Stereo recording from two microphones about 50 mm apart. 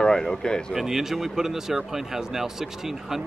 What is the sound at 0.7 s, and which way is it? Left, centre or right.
Speech, centre.